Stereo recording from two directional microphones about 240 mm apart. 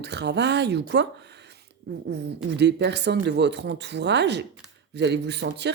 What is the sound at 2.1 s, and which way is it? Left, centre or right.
A woman's voice, right.